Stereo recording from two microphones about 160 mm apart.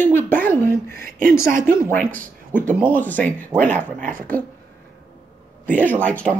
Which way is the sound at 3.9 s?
50° right (ahead or behind).